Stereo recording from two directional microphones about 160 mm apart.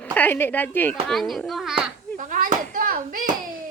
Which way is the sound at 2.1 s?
55° right (ahead or behind).